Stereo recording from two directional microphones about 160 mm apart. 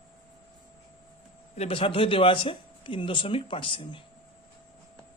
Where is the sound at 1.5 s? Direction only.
40° left (ahead or behind).